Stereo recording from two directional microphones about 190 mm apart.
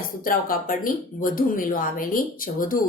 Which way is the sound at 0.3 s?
45° left (ahead or behind).